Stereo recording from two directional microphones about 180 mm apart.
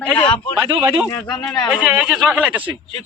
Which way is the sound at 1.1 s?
20° left (ahead or behind).